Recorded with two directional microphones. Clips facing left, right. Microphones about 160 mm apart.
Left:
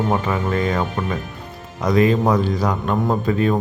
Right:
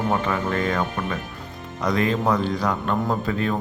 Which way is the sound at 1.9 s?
10° left (ahead or behind).